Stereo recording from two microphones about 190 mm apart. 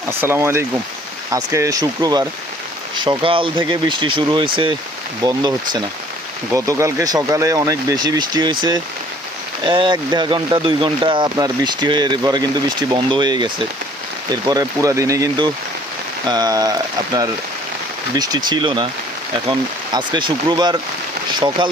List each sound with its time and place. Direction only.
0.1 s speech: 10° right (ahead or behind)
9.6 s speech: 25° right (ahead or behind)